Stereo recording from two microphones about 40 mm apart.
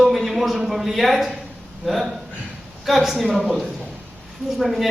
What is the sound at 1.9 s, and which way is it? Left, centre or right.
A woman's voice, centre.